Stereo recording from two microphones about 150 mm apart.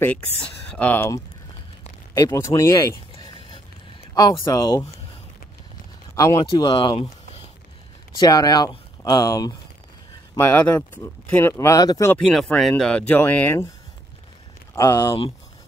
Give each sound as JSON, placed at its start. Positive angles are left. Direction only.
{"t": 0.7, "sound": "speech", "side_deg": 10}
{"t": 3.2, "sound": "a sound", "side_deg": 30}
{"t": 4.1, "sound": "speech", "side_deg": 25}
{"t": 6.1, "sound": "speech", "side_deg": 25}
{"t": 8.2, "sound": "speech", "side_deg": 25}
{"t": 12.2, "sound": "speech", "side_deg": 5}
{"t": 14.8, "sound": "speech", "side_deg": 20}